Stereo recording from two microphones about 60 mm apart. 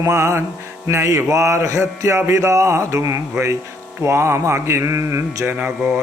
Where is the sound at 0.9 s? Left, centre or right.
Right.